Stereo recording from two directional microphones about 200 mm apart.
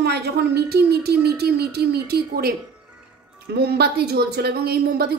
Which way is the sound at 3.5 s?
55° right (ahead or behind).